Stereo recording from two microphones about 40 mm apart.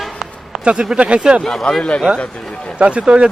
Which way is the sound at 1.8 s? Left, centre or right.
Left.